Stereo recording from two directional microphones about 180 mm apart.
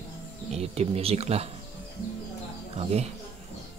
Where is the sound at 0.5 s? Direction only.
35° right (ahead or behind).